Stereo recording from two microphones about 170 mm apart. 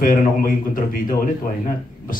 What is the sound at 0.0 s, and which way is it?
Speech, 55° left (ahead or behind).